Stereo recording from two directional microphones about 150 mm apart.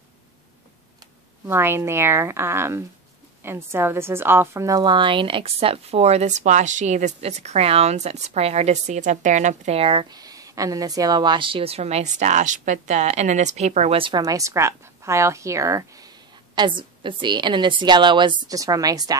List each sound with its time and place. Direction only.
1.5 s a woman's voice: 15° right (ahead or behind); by 14.2 s 35° right (ahead or behind)
14.2 s a woman's voice: 20° right (ahead or behind)
16.5 s a woman's voice: 30° right (ahead or behind)